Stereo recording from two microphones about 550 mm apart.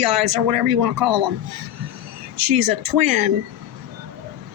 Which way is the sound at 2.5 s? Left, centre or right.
Right.